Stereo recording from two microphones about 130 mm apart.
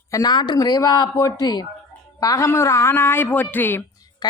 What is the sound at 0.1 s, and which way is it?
A woman's voice, 30° left (ahead or behind).